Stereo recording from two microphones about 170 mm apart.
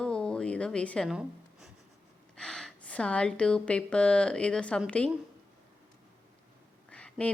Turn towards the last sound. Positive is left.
turn(degrees=5)  # may be behind; listen again after turning